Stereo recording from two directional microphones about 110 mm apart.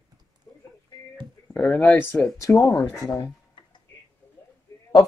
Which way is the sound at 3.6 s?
45° left (ahead or behind).